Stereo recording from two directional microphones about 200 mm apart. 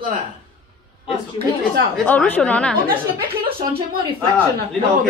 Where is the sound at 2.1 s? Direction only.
10° left (ahead or behind).